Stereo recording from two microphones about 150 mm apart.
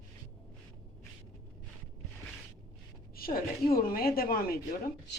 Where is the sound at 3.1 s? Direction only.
80° left.